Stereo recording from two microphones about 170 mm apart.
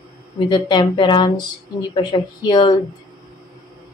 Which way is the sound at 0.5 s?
25° left (ahead or behind).